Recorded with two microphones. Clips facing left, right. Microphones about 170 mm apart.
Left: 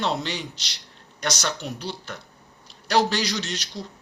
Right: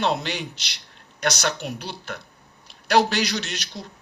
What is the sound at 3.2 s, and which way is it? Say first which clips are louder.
Speech: even; 60° right (ahead or behind).